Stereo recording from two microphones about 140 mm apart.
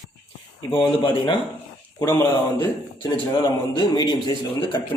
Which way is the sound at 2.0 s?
25° left (ahead or behind).